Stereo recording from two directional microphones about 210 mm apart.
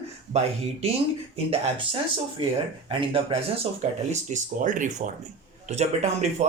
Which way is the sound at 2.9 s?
25° right (ahead or behind).